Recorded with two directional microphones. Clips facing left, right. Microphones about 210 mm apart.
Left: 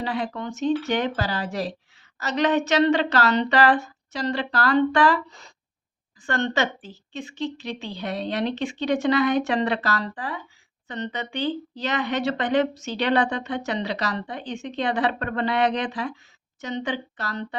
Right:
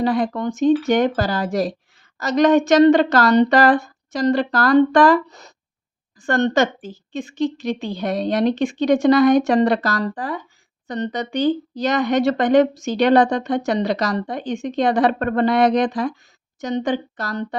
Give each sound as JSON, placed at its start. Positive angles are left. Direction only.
{"t": 0.0, "sound": "a woman's voice", "side_deg": -45}